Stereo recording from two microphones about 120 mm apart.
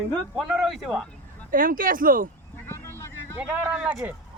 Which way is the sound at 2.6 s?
20° left (ahead or behind).